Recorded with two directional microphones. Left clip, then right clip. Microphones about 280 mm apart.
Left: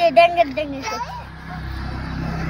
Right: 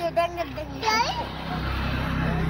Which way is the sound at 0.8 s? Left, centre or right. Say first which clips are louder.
Right 4 dB; right.